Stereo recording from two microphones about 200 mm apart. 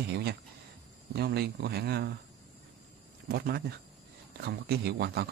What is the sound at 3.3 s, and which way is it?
Speech, 50° right (ahead or behind).